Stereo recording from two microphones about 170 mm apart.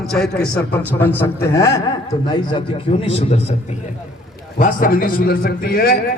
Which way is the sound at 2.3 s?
30° left (ahead or behind).